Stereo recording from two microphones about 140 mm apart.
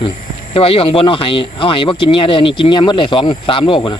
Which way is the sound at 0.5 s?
40° left (ahead or behind).